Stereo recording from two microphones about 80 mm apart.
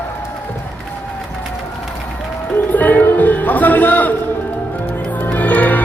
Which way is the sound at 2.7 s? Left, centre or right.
Left.